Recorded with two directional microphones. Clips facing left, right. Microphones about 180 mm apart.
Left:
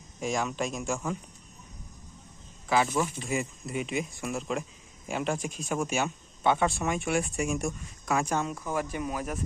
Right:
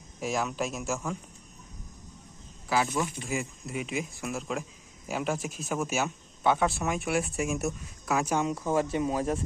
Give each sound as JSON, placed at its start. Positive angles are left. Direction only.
{"t": 0.2, "sound": "speech", "side_deg": -5}
{"t": 2.6, "sound": "speech", "side_deg": 0}
{"t": 8.4, "sound": "speech", "side_deg": -15}